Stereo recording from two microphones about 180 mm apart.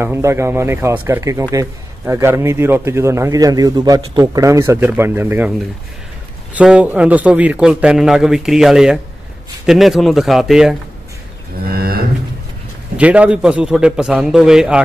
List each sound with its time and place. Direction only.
0.0 s a man's voice: 15° right (ahead or behind)
6.5 s a man's voice: 5° right (ahead or behind)
11.6 s a sound: 55° right (ahead or behind)
12.9 s a man's voice: 5° right (ahead or behind)